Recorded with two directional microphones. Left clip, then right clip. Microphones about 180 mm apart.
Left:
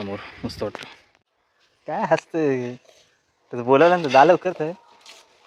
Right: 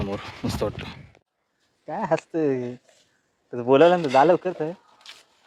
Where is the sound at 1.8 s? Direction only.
20° left (ahead or behind).